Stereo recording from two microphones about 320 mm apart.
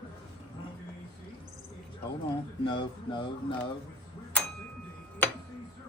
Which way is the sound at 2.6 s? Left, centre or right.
Centre.